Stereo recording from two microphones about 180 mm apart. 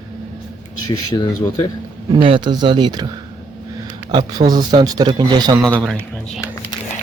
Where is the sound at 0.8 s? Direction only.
20° left (ahead or behind).